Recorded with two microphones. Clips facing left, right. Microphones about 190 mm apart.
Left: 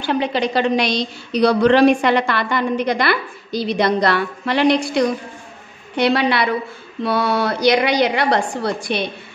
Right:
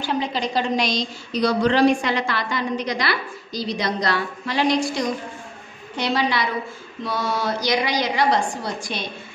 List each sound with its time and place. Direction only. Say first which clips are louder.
0.0 s a woman's voice: left 5 dB; 65° left (ahead or behind)